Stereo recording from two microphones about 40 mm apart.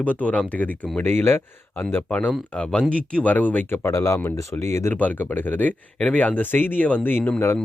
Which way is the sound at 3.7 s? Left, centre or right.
Left.